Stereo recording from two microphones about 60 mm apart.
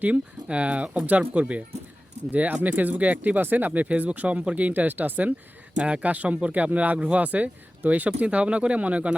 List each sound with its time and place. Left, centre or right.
0.0 s speech: right